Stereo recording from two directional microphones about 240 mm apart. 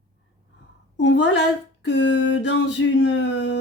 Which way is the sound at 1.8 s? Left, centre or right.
Left.